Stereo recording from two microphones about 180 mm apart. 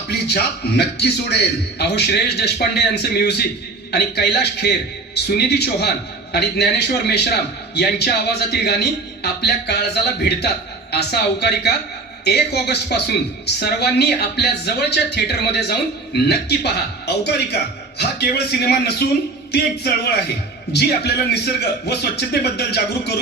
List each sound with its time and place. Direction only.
0.1 s speech: 65° left (ahead or behind)